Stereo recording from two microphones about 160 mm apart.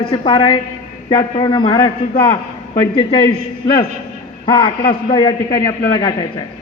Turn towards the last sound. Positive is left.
turn(degrees=30)  # may be behind; listen again after turning